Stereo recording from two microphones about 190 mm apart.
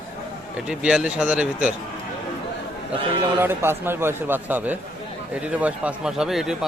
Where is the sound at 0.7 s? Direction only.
5° right (ahead or behind).